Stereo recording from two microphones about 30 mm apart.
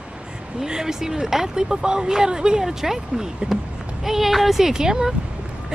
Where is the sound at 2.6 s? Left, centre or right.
Centre.